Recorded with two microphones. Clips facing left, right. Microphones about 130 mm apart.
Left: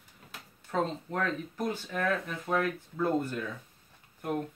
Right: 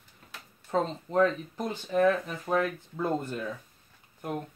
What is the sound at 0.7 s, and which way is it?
Speech, 25° right (ahead or behind).